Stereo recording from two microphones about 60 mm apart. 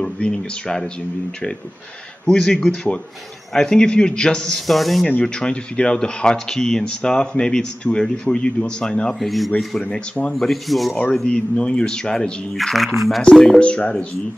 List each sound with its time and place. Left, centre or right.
0.0 s speech: centre
2.2 s speech: centre
4.6 s speech: centre
5.2 s speech: centre
9.2 s speech: centre
9.8 s speech: centre
10.3 s speech: centre
11.2 s speech: centre
13.2 s speech: centre